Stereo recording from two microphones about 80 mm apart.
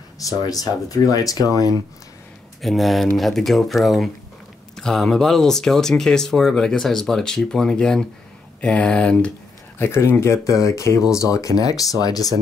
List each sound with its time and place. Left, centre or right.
0.2 s speech: left
2.6 s speech: centre
9.8 s speech: left